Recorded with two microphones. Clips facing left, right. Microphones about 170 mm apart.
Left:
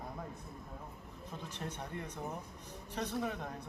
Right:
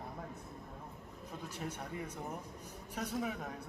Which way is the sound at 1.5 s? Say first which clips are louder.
Even; 10° right (ahead or behind).